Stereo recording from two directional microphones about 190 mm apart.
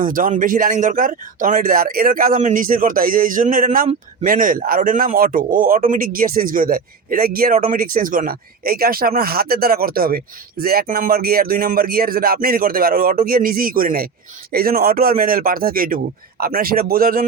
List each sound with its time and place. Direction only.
0.0 s a man's voice: 45° right (ahead or behind)